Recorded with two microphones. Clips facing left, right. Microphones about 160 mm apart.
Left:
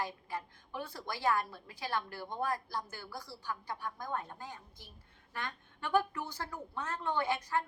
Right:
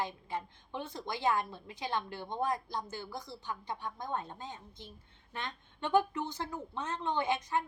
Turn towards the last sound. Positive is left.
turn(degrees=-20)  # may be behind; listen again after turning